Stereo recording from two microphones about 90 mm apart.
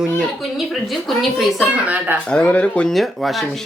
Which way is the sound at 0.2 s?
Centre (ahead or behind).